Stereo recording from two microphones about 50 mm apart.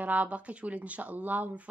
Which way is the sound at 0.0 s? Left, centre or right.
Right.